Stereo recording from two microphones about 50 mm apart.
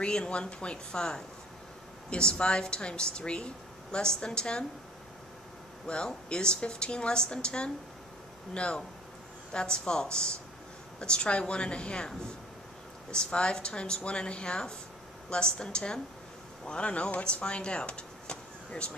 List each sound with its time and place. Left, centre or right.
0.0 s a woman's voice: centre
5.9 s a woman's voice: centre